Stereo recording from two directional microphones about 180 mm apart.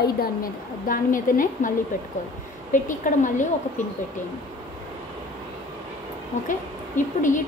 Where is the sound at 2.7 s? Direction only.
45° left (ahead or behind).